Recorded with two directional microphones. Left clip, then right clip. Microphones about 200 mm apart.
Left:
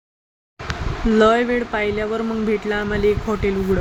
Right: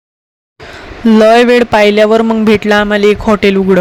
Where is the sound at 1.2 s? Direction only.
45° right (ahead or behind).